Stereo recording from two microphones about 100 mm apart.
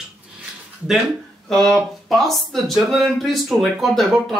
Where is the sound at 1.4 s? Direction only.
5° left (ahead or behind).